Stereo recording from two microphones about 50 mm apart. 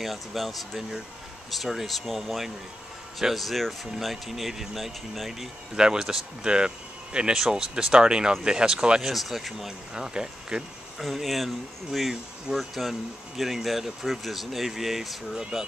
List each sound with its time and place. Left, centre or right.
0.0 s speech: centre
5.8 s speech: centre
9.1 s speech: centre
9.9 s speech: centre
11.0 s speech: centre